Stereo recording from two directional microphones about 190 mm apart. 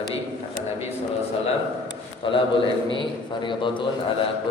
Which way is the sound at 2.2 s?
25° left (ahead or behind).